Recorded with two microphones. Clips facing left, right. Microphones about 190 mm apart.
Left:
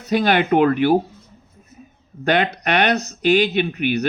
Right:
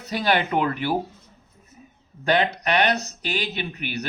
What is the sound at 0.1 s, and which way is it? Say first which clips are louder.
Speech: left 6 dB; 60° left (ahead or behind).